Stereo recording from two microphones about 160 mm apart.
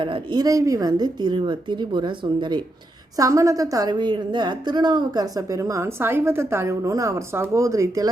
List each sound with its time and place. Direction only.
0.0 s a woman's voice: 30° right (ahead or behind)